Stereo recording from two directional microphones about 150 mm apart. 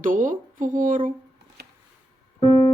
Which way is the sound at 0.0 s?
65° right (ahead or behind).